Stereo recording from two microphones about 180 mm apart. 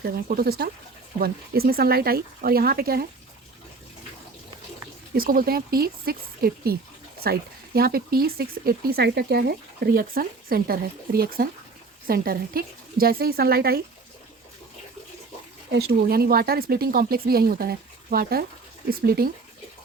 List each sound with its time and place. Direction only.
0.0 s speech: 60° right (ahead or behind)
5.1 s speech: 55° right (ahead or behind)
15.7 s speech: 60° right (ahead or behind)